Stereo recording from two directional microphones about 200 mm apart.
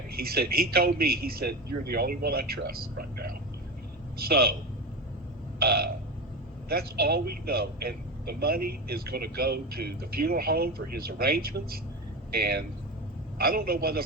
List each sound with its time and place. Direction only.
0.1 s a man's voice: 50° right (ahead or behind)
5.5 s a man's voice: 50° right (ahead or behind)